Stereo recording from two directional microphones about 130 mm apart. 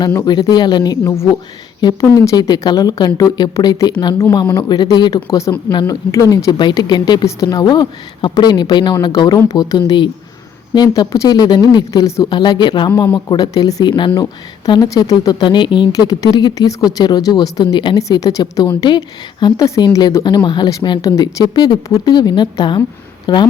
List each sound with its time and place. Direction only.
0.3 s a woman's voice: 35° left (ahead or behind)